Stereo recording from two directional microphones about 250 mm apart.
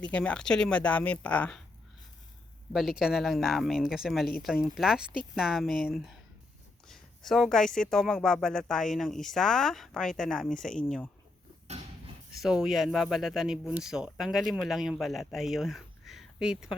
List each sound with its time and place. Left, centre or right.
0.1 s speech: centre
3.0 s speech: centre
12.4 s speech: centre